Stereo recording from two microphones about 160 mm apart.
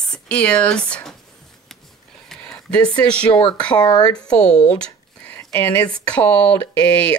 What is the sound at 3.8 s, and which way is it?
Speech, 25° left (ahead or behind).